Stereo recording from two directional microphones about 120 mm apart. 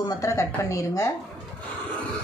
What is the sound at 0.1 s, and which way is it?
A woman's voice, 25° left (ahead or behind).